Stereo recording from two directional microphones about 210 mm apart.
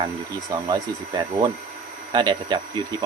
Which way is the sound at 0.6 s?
20° right (ahead or behind).